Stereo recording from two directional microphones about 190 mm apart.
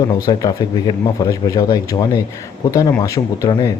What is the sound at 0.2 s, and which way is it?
Speech, 20° left (ahead or behind).